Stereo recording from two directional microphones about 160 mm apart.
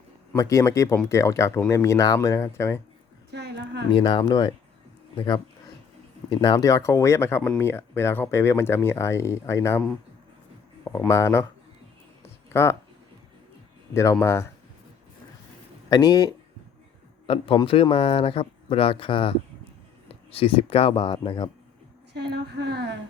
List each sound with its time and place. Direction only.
0.3 s speech: 20° left (ahead or behind)
3.3 s a sound: 90° right
3.9 s speech: 25° left (ahead or behind)
6.4 s speech: 25° left (ahead or behind)
12.5 s speech: 15° left (ahead or behind)
13.9 s speech: 20° left (ahead or behind)
15.9 s speech: 25° left (ahead or behind)
17.2 s speech: 35° left (ahead or behind)
22.1 s a sound: 90° right